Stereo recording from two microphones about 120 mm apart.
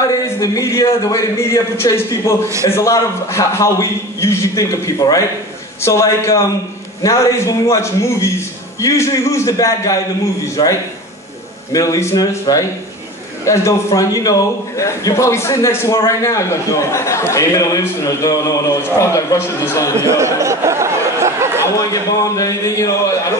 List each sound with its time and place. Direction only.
0.0 s a man's voice: 30° left (ahead or behind)
20.0 s a sound: 25° right (ahead or behind)
21.7 s a man's voice: 30° left (ahead or behind)